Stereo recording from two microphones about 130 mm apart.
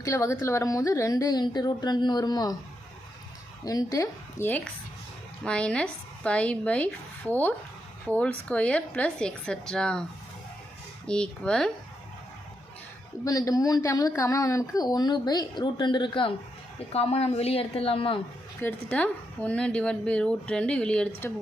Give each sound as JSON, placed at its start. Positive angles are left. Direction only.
{"t": 0.0, "sound": "a woman's voice", "side_deg": 25}
{"t": 3.6, "sound": "a woman's voice", "side_deg": 30}
{"t": 7.3, "sound": "speech", "side_deg": -20}
{"t": 8.0, "sound": "a woman's voice", "side_deg": 10}
{"t": 13.2, "sound": "a woman's voice", "side_deg": 25}
{"t": 16.9, "sound": "a woman's voice", "side_deg": 50}
{"t": 18.6, "sound": "a woman's voice", "side_deg": 10}